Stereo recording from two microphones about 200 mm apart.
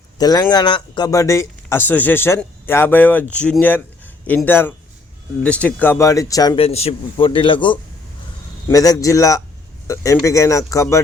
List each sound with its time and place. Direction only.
0.2 s speech: 20° left (ahead or behind)
6.6 s a man's voice: 30° left (ahead or behind); by 11.0 s 15° left (ahead or behind)